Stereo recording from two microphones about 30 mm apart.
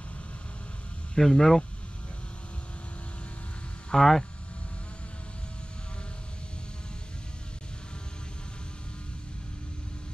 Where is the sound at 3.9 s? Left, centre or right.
Centre.